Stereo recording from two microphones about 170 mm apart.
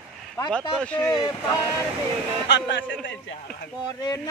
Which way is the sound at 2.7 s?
90° left.